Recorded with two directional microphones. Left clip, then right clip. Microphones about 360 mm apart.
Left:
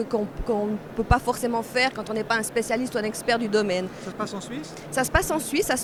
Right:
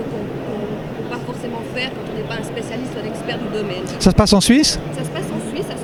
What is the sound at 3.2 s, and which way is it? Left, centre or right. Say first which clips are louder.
Speech: left 2 dB; left.